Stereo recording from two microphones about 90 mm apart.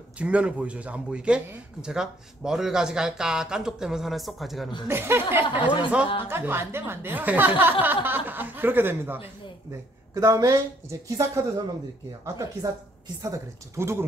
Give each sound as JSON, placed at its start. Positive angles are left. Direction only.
{"t": 0.2, "sound": "speech", "side_deg": -15}
{"t": 4.8, "sound": "a woman's voice", "side_deg": -25}
{"t": 10.1, "sound": "a woman's voice", "side_deg": -40}